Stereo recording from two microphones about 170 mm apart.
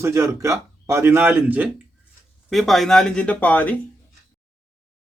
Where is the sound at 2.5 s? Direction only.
Centre (ahead or behind).